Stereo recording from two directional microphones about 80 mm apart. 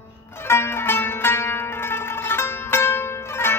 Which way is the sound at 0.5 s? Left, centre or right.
Left.